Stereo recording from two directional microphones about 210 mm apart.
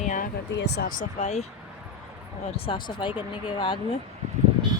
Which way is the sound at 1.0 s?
35° left (ahead or behind).